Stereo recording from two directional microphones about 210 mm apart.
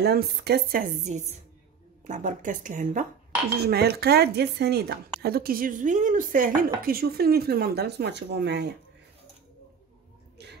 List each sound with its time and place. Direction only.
0.0 s speech: 50° right (ahead or behind)
3.5 s speech: 50° right (ahead or behind)
10.4 s a sound: 55° right (ahead or behind)